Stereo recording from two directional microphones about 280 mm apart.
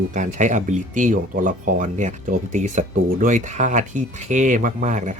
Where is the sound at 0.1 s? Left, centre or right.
Right.